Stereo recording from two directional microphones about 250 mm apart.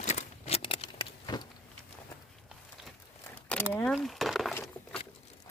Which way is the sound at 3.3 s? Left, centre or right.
Centre.